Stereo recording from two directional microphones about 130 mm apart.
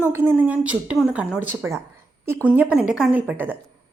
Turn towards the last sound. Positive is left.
turn(degrees=-15)  # may be behind; listen again after turning